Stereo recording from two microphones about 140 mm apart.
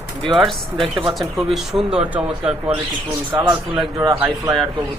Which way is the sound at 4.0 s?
25° right (ahead or behind).